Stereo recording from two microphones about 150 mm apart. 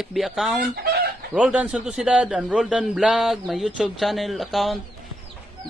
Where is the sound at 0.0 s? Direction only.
Centre (ahead or behind).